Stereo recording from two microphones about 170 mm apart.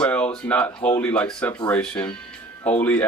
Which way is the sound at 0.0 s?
10° left (ahead or behind).